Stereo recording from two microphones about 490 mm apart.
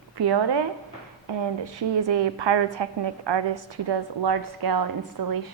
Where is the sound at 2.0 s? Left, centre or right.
Right.